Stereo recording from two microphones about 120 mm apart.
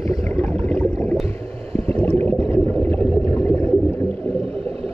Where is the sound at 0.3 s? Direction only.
10° left (ahead or behind).